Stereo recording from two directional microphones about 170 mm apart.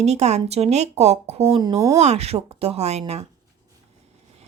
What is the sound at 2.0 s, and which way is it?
Speech, 40° right (ahead or behind).